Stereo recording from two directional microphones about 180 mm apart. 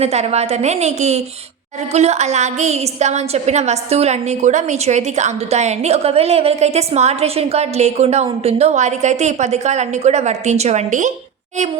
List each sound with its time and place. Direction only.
0.0 s a woman's voice: 35° right (ahead or behind)